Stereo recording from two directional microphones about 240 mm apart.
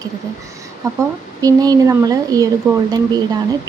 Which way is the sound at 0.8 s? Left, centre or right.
Centre.